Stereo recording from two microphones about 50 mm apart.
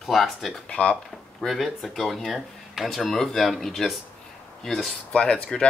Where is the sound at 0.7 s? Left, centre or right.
Left.